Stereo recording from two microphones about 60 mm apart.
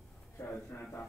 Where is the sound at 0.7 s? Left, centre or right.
Left.